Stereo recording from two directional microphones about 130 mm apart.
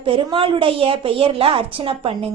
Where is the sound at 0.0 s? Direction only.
40° right (ahead or behind).